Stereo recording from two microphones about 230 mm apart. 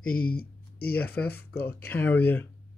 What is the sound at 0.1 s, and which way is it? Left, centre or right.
Speech, left.